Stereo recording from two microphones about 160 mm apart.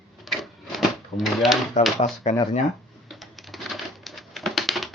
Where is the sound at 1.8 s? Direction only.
45° left (ahead or behind).